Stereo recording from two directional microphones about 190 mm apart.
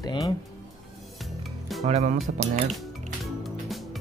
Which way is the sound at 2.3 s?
40° right (ahead or behind).